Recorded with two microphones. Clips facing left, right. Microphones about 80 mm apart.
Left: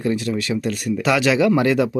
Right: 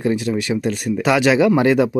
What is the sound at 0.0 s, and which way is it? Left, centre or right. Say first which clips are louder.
Speech: right 2 dB; right.